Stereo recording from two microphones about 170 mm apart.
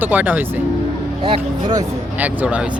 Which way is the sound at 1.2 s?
30° right (ahead or behind).